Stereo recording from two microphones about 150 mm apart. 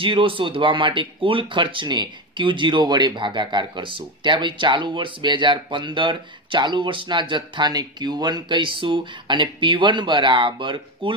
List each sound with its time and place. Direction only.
0.0 s speech: 35° right (ahead or behind)